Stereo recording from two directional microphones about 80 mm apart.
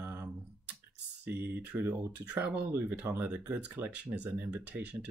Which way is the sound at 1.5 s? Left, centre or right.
Right.